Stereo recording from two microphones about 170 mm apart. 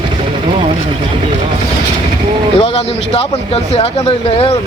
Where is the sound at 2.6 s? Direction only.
35° left (ahead or behind).